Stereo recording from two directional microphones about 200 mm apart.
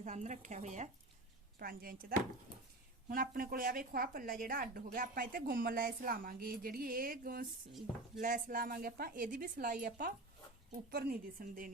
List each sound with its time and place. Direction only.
0.0 s speech: 35° right (ahead or behind)
1.5 s speech: 50° right (ahead or behind)